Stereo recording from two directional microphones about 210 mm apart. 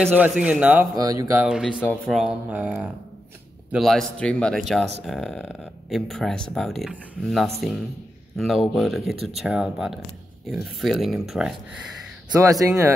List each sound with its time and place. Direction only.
0.1 s a man's voice: 5° right (ahead or behind)
0.9 s a man's voice: 15° right (ahead or behind)
1.4 s speech: centre (ahead or behind)
1.8 s speech: 10° left (ahead or behind)
2.1 s speech: 5° right (ahead or behind)
12.3 s a man's voice: 15° right (ahead or behind)